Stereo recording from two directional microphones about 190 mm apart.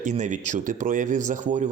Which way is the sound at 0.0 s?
40° right (ahead or behind).